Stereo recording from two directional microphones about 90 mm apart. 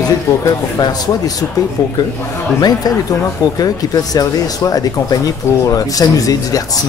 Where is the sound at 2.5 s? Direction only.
45° left (ahead or behind).